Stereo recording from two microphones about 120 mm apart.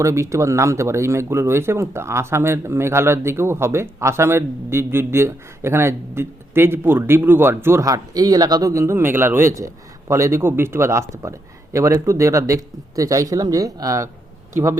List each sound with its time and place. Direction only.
0.0 s speech: 25° right (ahead or behind)